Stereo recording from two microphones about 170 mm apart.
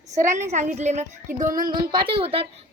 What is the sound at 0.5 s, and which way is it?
Speech, 45° right (ahead or behind).